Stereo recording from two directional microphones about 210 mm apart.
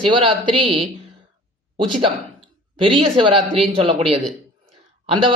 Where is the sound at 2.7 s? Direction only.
25° right (ahead or behind).